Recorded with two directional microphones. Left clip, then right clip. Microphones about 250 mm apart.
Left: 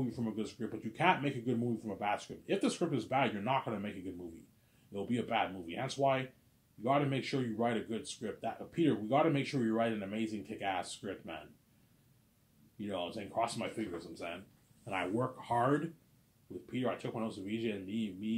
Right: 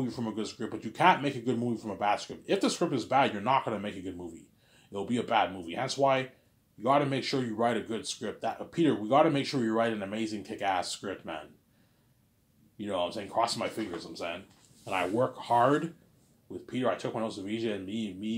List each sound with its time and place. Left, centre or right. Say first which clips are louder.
0.0 s speech: right 4 dB; centre
12.7 s speech: right 7 dB; centre
16.7 s speech: right 7 dB; centre